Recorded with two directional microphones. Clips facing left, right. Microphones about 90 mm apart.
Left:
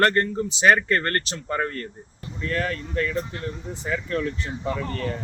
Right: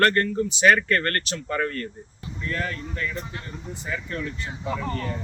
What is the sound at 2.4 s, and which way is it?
Speech, 90° left.